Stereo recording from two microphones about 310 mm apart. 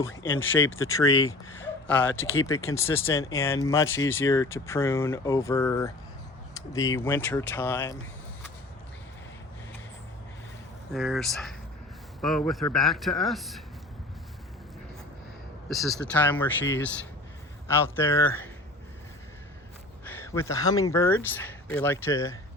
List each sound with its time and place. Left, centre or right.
0.8 s speech: centre
2.1 s speech: left
2.5 s speech: centre
7.0 s speech: centre
10.9 s speech: centre
15.7 s speech: centre
20.1 s speech: centre